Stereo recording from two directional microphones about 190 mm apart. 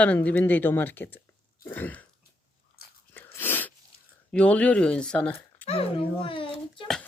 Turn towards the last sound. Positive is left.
turn(degrees=25)  # may be behind; listen again after turning